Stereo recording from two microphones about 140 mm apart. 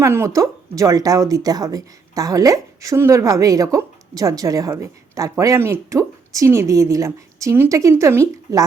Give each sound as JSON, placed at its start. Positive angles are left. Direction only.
{"t": 0.0, "sound": "a woman's voice", "side_deg": -20}